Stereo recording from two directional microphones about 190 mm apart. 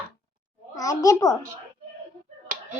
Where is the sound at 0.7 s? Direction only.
20° left (ahead or behind).